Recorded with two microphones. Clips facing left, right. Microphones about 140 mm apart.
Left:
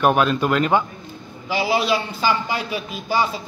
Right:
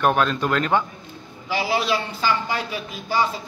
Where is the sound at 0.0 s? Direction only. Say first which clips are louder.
Left 3 dB; 10° left (ahead or behind).